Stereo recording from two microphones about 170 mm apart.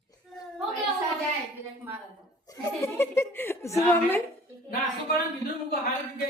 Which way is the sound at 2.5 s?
15° left (ahead or behind).